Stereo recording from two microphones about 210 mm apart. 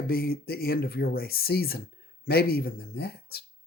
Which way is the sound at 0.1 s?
45° left (ahead or behind).